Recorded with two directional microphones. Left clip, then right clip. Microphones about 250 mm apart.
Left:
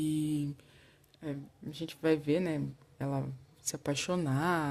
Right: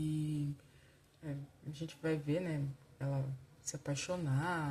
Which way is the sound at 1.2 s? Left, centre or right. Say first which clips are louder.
Left 7 dB; left.